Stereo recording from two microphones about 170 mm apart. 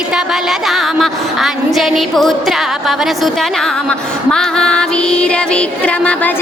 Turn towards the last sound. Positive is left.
turn(degrees=5)  # may be behind; listen again after turning